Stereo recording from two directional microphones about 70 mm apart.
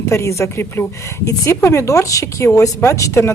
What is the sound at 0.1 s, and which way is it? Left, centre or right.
Speech, left.